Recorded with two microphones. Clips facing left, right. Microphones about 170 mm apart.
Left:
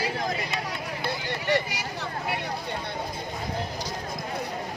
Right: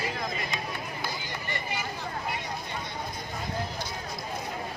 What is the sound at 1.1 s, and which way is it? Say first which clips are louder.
Vehicle: left 9 dB; 70° left (ahead or behind).